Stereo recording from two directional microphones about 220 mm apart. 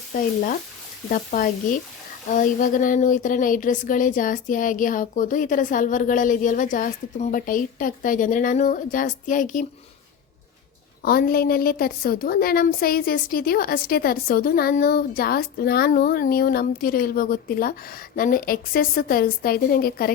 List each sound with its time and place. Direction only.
1.1 s speech: 40° left (ahead or behind)
11.0 s a woman's voice: 40° left (ahead or behind)